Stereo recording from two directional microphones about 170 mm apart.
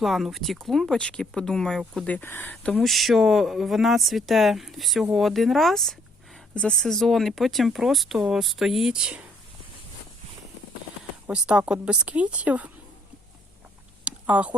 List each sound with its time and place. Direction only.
0.0 s speech: centre (ahead or behind)
11.3 s a woman's voice: 5° right (ahead or behind)
14.0 s a sound: 5° right (ahead or behind)